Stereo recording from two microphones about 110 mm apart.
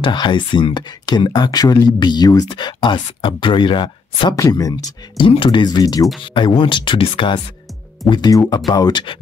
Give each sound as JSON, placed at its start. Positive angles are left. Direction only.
{"t": 0.0, "sound": "speech", "side_deg": 45}
{"t": 4.4, "sound": "speech", "side_deg": 30}
{"t": 5.2, "sound": "speech", "side_deg": 50}
{"t": 6.2, "sound": "speech", "side_deg": 50}
{"t": 8.1, "sound": "speech", "side_deg": 35}